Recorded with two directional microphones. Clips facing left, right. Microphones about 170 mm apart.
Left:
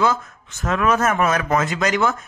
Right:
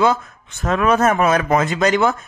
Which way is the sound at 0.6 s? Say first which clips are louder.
Right 3 dB; 30° right (ahead or behind).